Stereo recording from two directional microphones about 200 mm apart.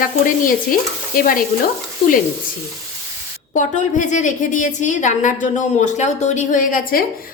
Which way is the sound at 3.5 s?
40° left (ahead or behind).